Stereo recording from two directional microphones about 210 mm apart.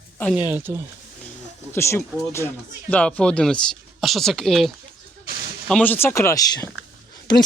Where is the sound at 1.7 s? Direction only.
15° left (ahead or behind).